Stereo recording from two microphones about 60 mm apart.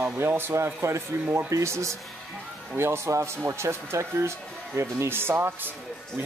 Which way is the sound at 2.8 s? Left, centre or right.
Right.